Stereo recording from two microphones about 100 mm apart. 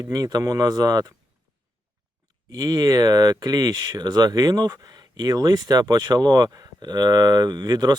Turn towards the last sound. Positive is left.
turn(degrees=-40)  # may be behind; listen again after turning